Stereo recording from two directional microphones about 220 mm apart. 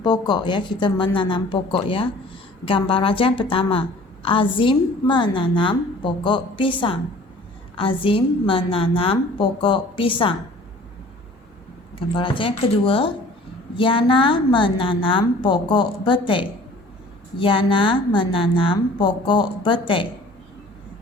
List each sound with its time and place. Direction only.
0.0 s a woman's voice: 20° left (ahead or behind)
11.9 s a woman's voice: 25° left (ahead or behind)